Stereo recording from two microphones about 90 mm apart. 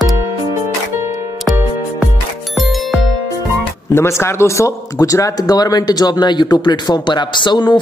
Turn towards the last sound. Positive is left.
turn(degrees=55)  # may be behind; listen again after turning